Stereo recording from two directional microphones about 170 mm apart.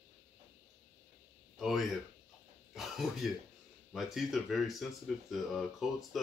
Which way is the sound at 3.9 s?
Centre (ahead or behind).